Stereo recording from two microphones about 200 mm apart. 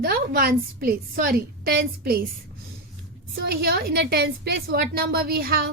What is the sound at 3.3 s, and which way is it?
A woman's voice, 50° right (ahead or behind).